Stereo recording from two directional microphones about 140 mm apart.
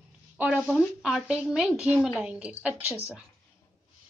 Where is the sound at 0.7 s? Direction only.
Centre (ahead or behind).